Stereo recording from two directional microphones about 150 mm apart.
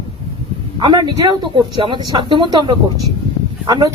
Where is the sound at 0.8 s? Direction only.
30° right (ahead or behind).